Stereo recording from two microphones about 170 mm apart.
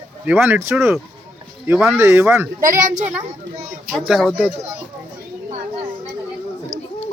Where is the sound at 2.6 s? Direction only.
50° right (ahead or behind).